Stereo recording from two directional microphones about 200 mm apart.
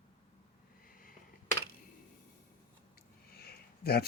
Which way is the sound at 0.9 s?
45° left (ahead or behind).